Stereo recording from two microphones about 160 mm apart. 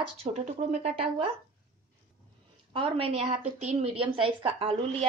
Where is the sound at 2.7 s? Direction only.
35° right (ahead or behind).